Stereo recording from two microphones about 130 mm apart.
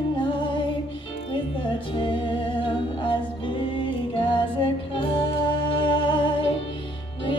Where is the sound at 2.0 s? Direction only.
40° left (ahead or behind).